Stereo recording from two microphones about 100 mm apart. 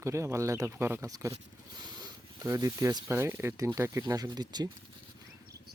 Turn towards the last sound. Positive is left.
turn(degrees=-45)  # may be behind; listen again after turning